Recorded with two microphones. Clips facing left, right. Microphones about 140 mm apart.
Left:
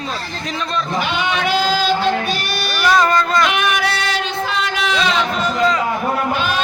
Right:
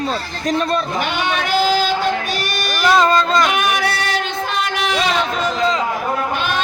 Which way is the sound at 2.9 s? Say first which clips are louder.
Right 1 dB; 25° right (ahead or behind).